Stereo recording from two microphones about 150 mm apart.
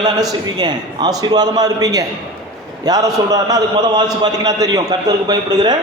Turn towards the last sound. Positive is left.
turn(degrees=-30)  # may be behind; listen again after turning